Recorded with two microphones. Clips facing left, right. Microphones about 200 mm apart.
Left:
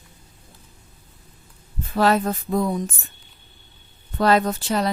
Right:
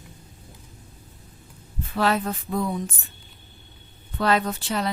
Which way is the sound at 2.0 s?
40° left (ahead or behind).